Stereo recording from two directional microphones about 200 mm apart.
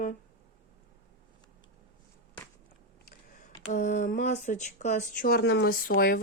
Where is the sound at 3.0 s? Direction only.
40° left (ahead or behind).